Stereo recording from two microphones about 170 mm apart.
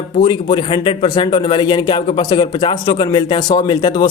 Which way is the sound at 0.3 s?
25° left (ahead or behind).